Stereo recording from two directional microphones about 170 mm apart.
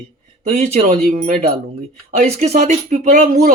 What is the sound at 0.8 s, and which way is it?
Speech, 50° right (ahead or behind).